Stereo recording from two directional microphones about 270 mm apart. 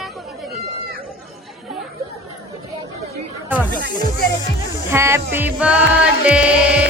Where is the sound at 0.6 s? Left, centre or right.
Left.